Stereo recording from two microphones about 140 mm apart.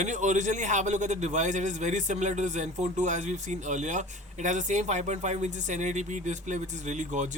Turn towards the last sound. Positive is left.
turn(degrees=-60)  # may be behind; listen again after turning